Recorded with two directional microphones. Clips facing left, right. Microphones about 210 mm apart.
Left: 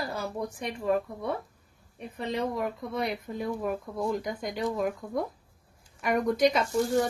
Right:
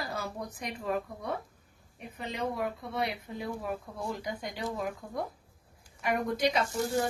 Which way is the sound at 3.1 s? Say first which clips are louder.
Left 5 dB; 45° left (ahead or behind).